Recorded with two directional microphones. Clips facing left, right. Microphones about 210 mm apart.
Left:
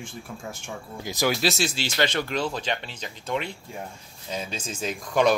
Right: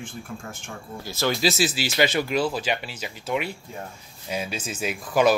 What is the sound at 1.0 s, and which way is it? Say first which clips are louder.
Speech: left 2 dB; 15° left (ahead or behind).